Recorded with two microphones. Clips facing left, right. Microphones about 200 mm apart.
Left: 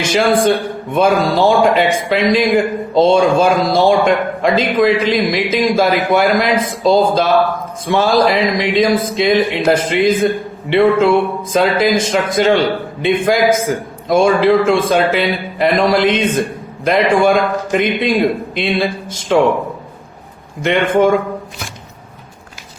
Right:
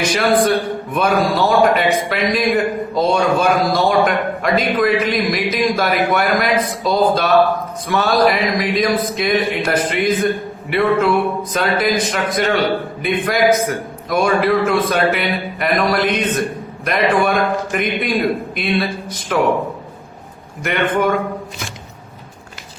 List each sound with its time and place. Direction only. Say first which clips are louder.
0.1 s speech: left 4 dB; 25° left (ahead or behind)
20.6 s speech: left 5 dB; 25° left (ahead or behind)